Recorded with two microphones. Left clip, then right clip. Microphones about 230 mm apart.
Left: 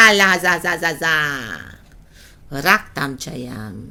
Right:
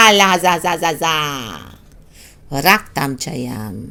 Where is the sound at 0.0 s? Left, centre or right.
Centre.